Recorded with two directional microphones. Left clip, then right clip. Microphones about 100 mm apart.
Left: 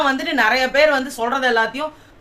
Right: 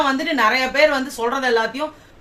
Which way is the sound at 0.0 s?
40° left (ahead or behind).